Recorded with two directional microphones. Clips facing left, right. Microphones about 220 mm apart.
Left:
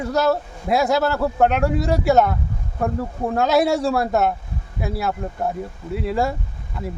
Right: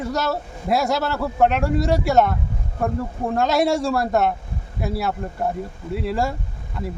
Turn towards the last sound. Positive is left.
turn(degrees=0)  # may be behind; listen again after turning